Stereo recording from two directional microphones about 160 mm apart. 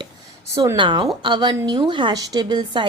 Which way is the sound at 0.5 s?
20° right (ahead or behind).